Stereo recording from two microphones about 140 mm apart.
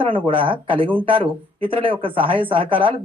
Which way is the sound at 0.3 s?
40° right (ahead or behind).